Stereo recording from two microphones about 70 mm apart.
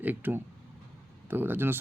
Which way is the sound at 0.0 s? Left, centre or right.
Right.